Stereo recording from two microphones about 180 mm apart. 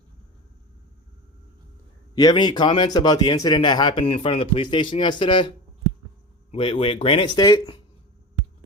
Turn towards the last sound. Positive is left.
turn(degrees=20)  # may be behind; listen again after turning